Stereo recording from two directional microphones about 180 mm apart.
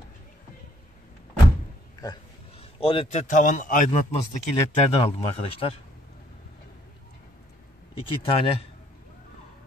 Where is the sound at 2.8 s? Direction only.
30° left (ahead or behind); by 3.9 s 45° left (ahead or behind).